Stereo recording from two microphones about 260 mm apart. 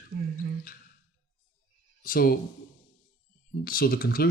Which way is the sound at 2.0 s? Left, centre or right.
Left.